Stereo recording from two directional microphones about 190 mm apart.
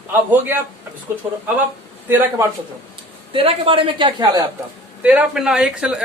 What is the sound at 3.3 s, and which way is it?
Speech, 30° right (ahead or behind).